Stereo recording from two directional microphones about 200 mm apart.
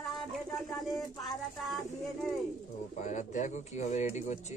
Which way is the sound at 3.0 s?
40° left (ahead or behind).